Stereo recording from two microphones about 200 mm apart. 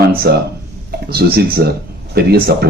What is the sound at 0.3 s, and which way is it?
Speech, 55° right (ahead or behind).